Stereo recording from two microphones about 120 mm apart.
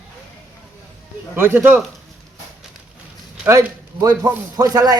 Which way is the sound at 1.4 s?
15° right (ahead or behind).